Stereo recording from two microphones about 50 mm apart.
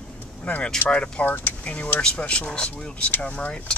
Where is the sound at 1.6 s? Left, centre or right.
Left.